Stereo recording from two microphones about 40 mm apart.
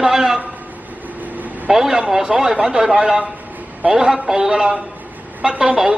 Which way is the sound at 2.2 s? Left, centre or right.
Right.